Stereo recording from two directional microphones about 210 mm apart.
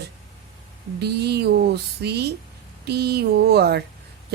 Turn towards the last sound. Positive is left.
turn(degrees=-50)  # may be behind; listen again after turning